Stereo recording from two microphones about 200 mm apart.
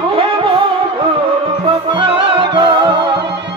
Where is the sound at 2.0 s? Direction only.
25° right (ahead or behind).